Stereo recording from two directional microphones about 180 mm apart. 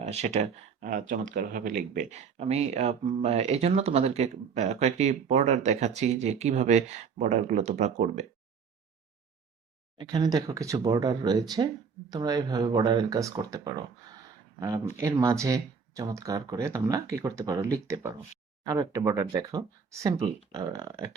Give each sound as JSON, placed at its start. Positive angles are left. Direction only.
{"t": 0.0, "sound": "speech", "side_deg": -40}
{"t": 10.0, "sound": "speech", "side_deg": -20}